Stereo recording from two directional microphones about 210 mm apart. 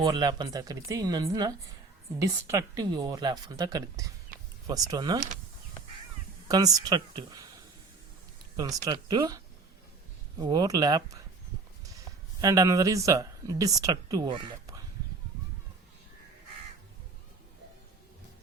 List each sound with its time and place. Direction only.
0.0 s speech: 20° right (ahead or behind)
6.5 s speech: 15° right (ahead or behind)
8.5 s speech: 15° right (ahead or behind)
10.4 s speech: 20° right (ahead or behind)
12.4 s speech: 15° right (ahead or behind)